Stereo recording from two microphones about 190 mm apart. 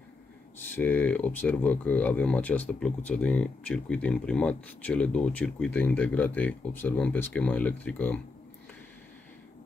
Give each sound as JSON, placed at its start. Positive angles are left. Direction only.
{"t": 0.7, "sound": "speech", "side_deg": 10}